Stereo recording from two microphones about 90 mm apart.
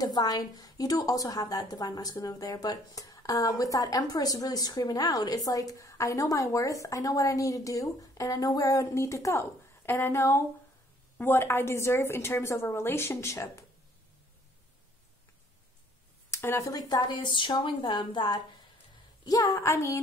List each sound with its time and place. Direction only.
0.0 s a woman's voice: 45° left (ahead or behind)
16.3 s speech: 30° left (ahead or behind); by 17.3 s 50° left (ahead or behind)
17.3 s a woman's voice: 65° left (ahead or behind)
19.2 s a woman's voice: 45° left (ahead or behind)